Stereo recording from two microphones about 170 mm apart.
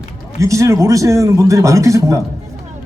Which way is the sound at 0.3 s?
20° right (ahead or behind).